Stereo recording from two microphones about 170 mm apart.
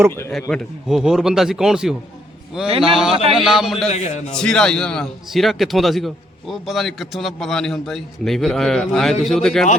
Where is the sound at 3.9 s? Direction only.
45° left (ahead or behind).